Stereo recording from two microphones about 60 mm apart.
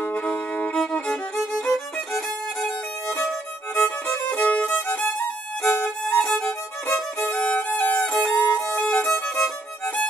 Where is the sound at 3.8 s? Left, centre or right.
Left.